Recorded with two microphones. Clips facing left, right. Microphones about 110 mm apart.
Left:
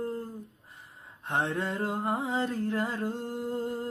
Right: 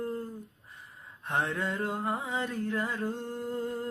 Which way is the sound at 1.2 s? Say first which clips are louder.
Left 1 dB; 25° left (ahead or behind).